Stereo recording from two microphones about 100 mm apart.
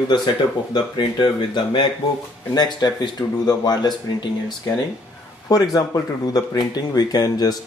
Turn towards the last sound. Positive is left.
turn(degrees=40)  # may be behind; listen again after turning